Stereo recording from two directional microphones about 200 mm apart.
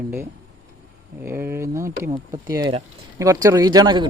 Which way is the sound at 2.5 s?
20° right (ahead or behind).